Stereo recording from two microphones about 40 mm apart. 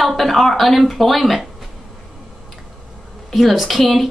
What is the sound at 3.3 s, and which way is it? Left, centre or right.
Speech, centre.